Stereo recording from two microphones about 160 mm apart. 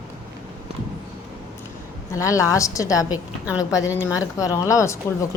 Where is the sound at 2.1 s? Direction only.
20° left (ahead or behind).